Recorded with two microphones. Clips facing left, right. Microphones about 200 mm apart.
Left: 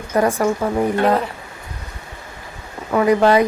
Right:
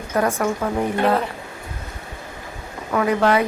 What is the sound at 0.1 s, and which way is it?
Speech, 10° left (ahead or behind).